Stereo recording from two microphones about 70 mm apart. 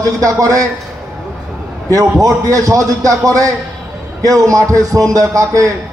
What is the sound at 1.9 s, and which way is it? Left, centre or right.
Speech, right.